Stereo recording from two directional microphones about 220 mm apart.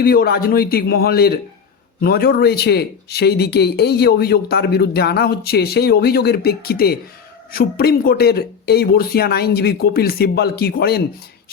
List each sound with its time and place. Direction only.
0.0 s speech: 45° left (ahead or behind)